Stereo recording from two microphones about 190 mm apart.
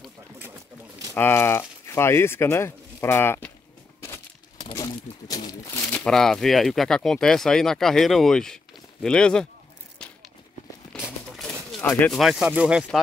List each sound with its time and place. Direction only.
1.1 s speech: 10° left (ahead or behind)
4.6 s crumpling: 20° left (ahead or behind)
5.9 s speech: 5° left (ahead or behind)
10.9 s a sound: 5° right (ahead or behind)
11.8 s speech: 10° left (ahead or behind)
12.1 s speech: centre (ahead or behind)